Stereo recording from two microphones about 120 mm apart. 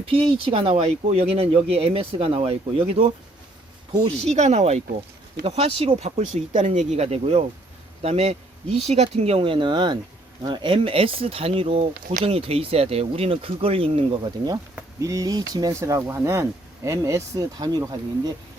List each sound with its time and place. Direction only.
0.0 s speech: 50° right (ahead or behind)
4.3 s speech: 70° right (ahead or behind); by 14.2 s 50° right (ahead or behind)
14.3 s speech: 35° right (ahead or behind)